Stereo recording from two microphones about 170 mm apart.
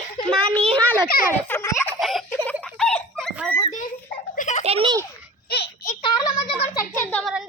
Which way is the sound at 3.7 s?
50° left (ahead or behind).